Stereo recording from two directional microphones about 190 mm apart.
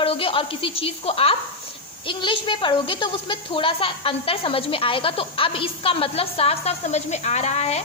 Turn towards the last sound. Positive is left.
turn(degrees=35)  # may be behind; listen again after turning